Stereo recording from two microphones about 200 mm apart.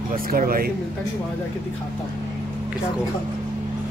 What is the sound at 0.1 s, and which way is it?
Speech, 45° right (ahead or behind).